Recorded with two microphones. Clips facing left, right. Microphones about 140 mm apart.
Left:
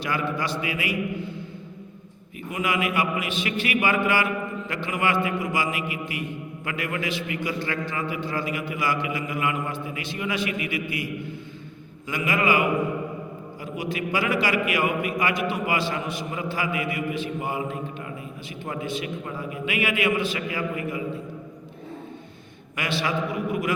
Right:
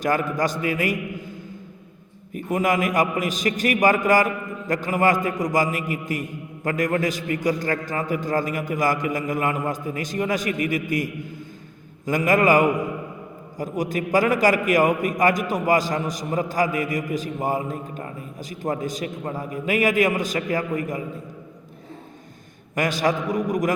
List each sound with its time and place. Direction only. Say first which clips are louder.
0.0 s a man's voice: right 5 dB; 45° right (ahead or behind)
22.7 s a man's voice: right 5 dB; 45° right (ahead or behind)